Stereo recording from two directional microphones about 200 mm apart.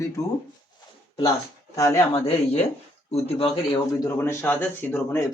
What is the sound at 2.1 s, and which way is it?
Speech, 30° left (ahead or behind).